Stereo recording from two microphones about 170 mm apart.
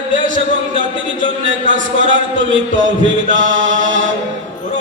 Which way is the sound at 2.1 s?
90° right.